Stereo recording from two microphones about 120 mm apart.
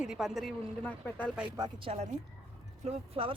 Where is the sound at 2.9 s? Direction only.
60° right (ahead or behind).